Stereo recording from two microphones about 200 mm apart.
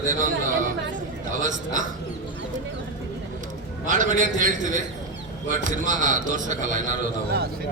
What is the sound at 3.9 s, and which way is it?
A man's voice, 40° right (ahead or behind).